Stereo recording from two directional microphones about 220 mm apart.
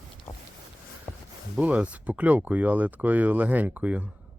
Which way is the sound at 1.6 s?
5° right (ahead or behind).